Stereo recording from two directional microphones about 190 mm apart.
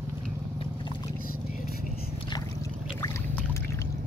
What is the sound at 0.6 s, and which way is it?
Boat, 25° left (ahead or behind).